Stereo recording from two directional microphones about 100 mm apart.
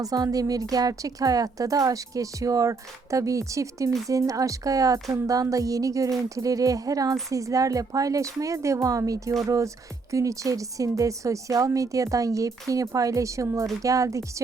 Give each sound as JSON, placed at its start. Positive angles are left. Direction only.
{"t": 0.0, "sound": "a woman's voice", "side_deg": -35}